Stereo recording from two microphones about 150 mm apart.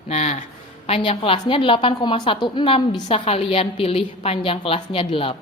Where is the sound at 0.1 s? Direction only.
50° left (ahead or behind).